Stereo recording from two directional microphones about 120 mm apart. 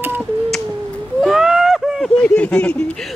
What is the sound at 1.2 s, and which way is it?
Speech, 5° right (ahead or behind).